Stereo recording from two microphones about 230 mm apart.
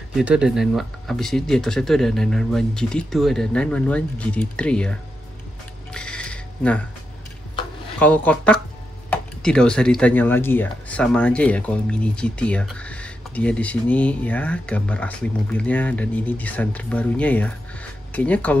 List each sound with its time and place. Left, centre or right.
0.1 s speech: centre
5.9 s music: centre
8.0 s speech: centre